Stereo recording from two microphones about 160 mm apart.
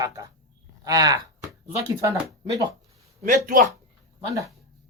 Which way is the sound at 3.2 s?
60° right (ahead or behind).